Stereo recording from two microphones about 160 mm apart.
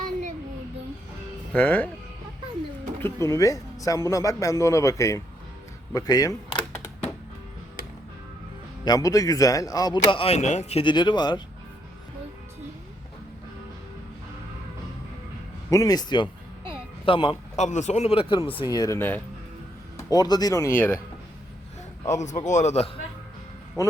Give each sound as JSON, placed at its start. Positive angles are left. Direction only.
{"t": 1.5, "sound": "speech", "side_deg": 10}
{"t": 3.0, "sound": "speech", "side_deg": 20}
{"t": 5.9, "sound": "a sound", "side_deg": 25}
{"t": 8.8, "sound": "speech", "side_deg": 25}
{"t": 15.7, "sound": "speech", "side_deg": 20}
{"t": 17.6, "sound": "speech", "side_deg": 45}
{"t": 18.9, "sound": "speech", "side_deg": 10}
{"t": 20.0, "sound": "speech", "side_deg": 25}
{"t": 22.1, "sound": "a man's voice", "side_deg": 45}
{"t": 23.8, "sound": "speech", "side_deg": 20}